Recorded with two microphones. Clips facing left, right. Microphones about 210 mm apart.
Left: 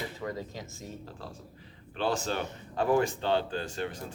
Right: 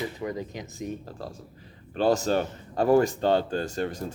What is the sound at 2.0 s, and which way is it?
Speech, 40° right (ahead or behind).